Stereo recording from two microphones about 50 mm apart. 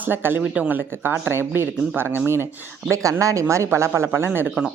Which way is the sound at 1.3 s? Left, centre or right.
Right.